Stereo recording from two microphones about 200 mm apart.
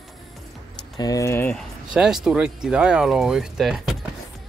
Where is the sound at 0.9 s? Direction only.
15° left (ahead or behind).